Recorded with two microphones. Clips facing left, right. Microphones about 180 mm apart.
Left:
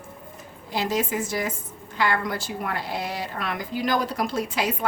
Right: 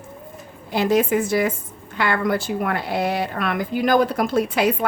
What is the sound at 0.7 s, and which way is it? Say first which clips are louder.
A woman's voice: right 7 dB; 60° right (ahead or behind).